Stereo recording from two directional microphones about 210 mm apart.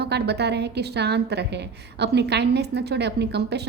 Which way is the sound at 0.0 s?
50° right (ahead or behind).